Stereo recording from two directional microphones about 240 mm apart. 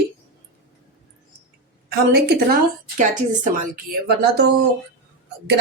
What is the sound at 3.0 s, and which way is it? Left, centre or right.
A woman's voice, right.